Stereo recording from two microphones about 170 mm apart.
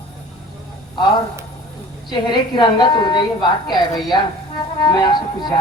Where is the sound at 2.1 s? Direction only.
25° left (ahead or behind).